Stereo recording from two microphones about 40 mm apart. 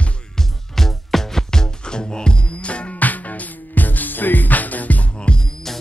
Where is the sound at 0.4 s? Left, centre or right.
Centre; by 3.0 s left.